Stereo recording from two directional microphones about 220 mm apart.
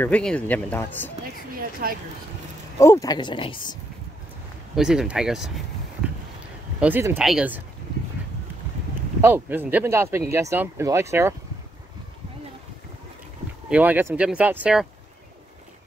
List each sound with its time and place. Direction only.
0.0 s speech: 5° left (ahead or behind)
1.5 s a sound: 40° right (ahead or behind)
2.8 s speech: 15° left (ahead or behind)
4.7 s speech: 5° right (ahead or behind)
6.8 s speech: 10° right (ahead or behind)
9.2 s speech: 10° right (ahead or behind)
13.7 s speech: 5° right (ahead or behind)